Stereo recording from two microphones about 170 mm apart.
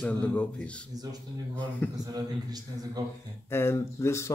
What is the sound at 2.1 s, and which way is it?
Speech, 25° right (ahead or behind).